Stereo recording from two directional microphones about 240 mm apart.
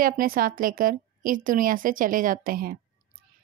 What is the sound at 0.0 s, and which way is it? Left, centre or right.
Speech, right.